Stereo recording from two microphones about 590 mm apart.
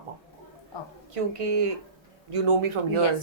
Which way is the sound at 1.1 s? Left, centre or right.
Right.